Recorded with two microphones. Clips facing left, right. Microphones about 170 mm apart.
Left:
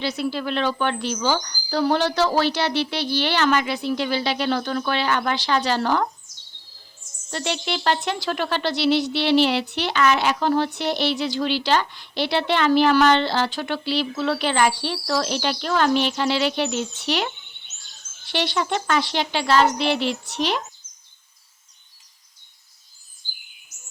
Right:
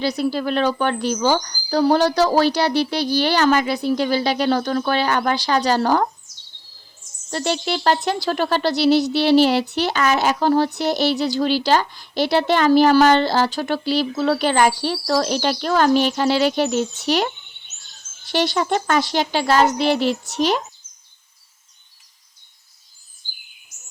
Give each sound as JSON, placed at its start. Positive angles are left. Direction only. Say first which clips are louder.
{"t": 0.0, "sound": "a woman's voice", "louder": "right 4 dB", "side_deg": -40}
{"t": 7.3, "sound": "a woman's voice", "louder": "right 4 dB", "side_deg": -40}